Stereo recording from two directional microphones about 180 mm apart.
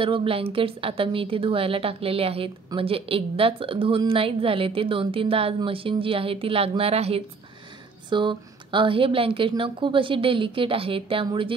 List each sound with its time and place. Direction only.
0.0 s a woman's voice: 30° right (ahead or behind)